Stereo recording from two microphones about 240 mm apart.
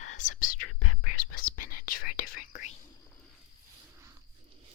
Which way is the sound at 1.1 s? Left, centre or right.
Left.